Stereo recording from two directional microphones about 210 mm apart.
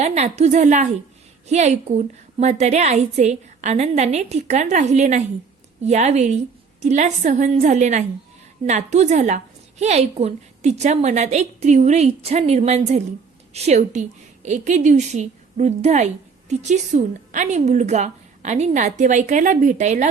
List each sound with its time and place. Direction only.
0.0 s a woman's voice: 30° right (ahead or behind)